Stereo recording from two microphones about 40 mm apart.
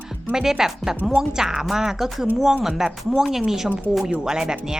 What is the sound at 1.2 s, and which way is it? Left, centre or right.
Speech, centre.